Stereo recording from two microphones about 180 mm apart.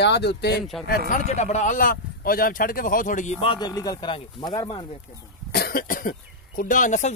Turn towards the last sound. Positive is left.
turn(degrees=45)  # may be behind; listen again after turning